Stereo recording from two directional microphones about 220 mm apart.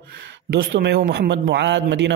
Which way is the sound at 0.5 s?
50° right (ahead or behind).